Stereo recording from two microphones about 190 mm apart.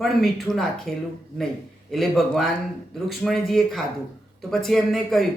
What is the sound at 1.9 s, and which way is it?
A man's voice, centre (ahead or behind).